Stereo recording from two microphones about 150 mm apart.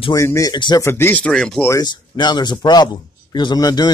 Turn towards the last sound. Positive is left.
turn(degrees=25)  # may be behind; listen again after turning